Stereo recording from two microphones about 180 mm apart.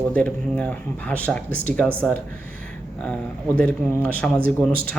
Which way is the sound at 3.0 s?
5° left (ahead or behind).